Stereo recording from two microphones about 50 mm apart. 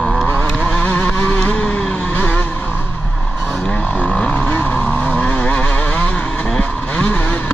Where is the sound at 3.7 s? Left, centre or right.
Left.